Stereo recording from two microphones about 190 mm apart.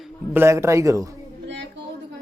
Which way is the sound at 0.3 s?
15° right (ahead or behind).